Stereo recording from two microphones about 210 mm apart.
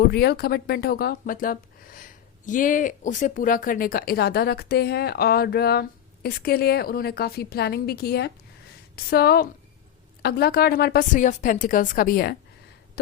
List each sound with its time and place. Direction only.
0.0 s speech: 50° left (ahead or behind)